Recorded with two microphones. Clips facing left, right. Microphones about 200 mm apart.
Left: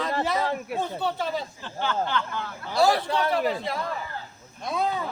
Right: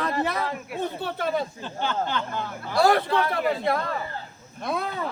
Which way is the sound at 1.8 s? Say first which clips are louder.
Even; 20° right (ahead or behind).